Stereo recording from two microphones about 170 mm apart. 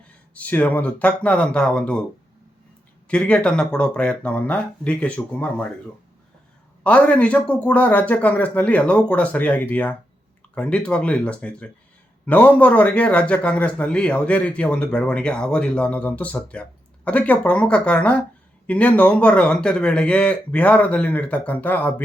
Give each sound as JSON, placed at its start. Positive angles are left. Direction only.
{"t": 0.3, "sound": "a man's voice", "side_deg": 10}
{"t": 3.1, "sound": "a man's voice", "side_deg": 5}
{"t": 6.8, "sound": "a man's voice", "side_deg": 5}